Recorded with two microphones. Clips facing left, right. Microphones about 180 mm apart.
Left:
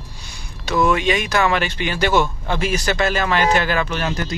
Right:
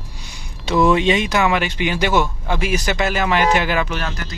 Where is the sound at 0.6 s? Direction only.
25° right (ahead or behind).